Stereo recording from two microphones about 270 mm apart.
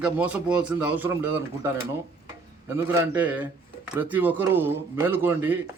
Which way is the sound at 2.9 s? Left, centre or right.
Centre.